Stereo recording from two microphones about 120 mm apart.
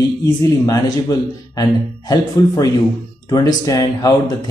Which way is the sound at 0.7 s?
30° left (ahead or behind).